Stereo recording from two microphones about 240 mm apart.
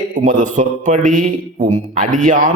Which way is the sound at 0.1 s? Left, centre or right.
Right.